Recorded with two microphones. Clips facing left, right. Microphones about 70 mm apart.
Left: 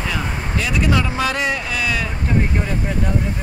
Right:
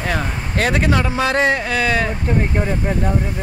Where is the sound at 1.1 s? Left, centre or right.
Right.